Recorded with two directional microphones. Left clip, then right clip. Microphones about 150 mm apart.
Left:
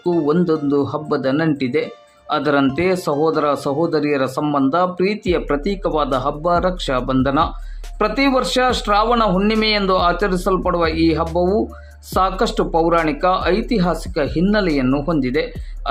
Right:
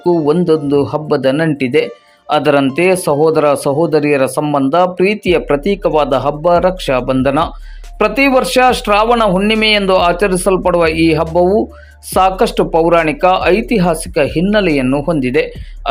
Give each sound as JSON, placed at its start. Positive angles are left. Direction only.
{"t": 0.0, "sound": "speech", "side_deg": -20}